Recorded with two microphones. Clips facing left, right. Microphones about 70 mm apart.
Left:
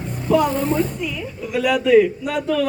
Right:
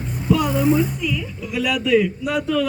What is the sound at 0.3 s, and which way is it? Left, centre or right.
Speech, left.